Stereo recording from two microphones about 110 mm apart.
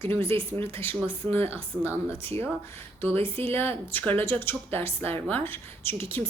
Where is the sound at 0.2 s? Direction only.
55° right (ahead or behind).